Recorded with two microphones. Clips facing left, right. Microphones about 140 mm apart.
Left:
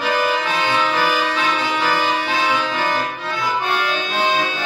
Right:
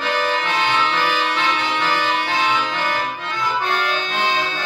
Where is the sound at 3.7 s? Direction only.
10° left (ahead or behind).